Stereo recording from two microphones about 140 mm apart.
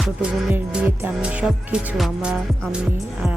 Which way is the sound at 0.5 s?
15° right (ahead or behind).